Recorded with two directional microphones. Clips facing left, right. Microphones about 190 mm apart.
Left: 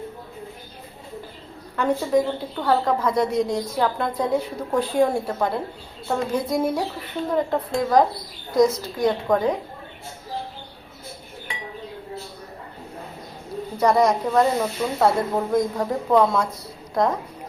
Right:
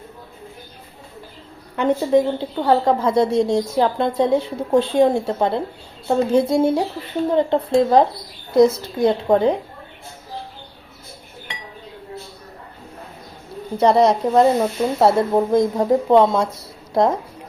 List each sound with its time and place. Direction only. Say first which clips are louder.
1.7 s a woman's voice: right 4 dB; 25° right (ahead or behind)
13.7 s a woman's voice: right 4 dB; 25° right (ahead or behind)